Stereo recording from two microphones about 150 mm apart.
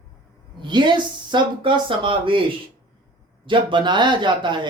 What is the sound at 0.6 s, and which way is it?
Speech, 30° right (ahead or behind).